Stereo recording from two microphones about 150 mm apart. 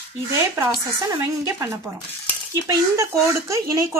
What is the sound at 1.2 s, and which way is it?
Speech, 20° right (ahead or behind).